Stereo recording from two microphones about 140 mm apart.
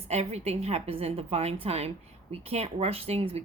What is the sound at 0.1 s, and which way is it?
A woman's voice, 50° right (ahead or behind).